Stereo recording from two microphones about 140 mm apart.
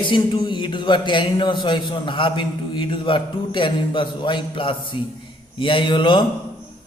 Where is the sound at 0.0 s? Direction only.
35° left (ahead or behind).